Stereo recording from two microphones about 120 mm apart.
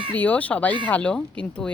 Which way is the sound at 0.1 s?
15° left (ahead or behind).